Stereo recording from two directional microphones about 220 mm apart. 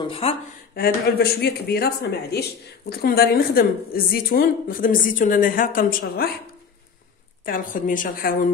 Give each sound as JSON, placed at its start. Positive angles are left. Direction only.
{"t": 0.0, "sound": "speech", "side_deg": 25}
{"t": 0.7, "sound": "a woman's voice", "side_deg": 45}
{"t": 7.4, "sound": "a woman's voice", "side_deg": 40}